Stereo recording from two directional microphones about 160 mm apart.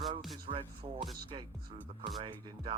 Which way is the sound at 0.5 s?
35° right (ahead or behind).